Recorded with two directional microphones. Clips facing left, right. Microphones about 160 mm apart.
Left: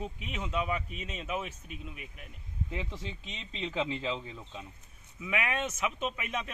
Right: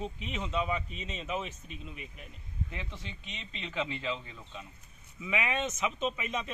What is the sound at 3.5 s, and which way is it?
Speech, 30° left (ahead or behind).